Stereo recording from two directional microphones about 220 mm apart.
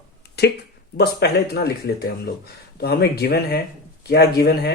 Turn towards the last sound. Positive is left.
turn(degrees=45)  # may be behind; listen again after turning